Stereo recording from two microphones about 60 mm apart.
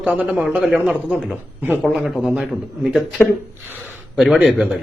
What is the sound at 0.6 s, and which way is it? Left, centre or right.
Speech, centre.